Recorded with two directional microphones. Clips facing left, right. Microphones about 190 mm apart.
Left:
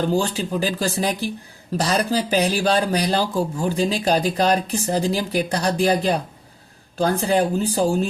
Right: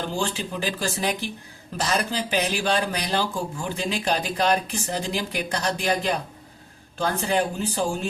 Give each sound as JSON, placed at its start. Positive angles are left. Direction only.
{"t": 0.1, "sound": "speech", "side_deg": 40}